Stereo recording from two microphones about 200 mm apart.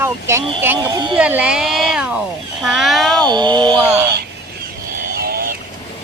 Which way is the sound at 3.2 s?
20° right (ahead or behind).